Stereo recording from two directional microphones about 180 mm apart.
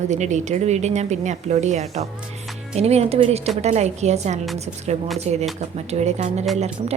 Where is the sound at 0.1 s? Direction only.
40° right (ahead or behind).